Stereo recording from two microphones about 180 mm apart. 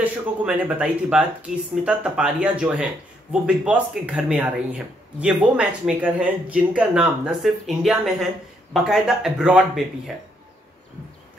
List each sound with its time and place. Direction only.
0.0 s speech: 5° right (ahead or behind)